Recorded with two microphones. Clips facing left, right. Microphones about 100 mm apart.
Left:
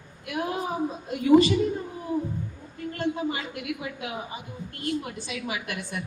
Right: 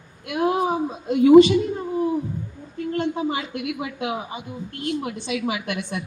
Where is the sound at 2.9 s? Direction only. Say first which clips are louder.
Right 4 dB; 25° right (ahead or behind).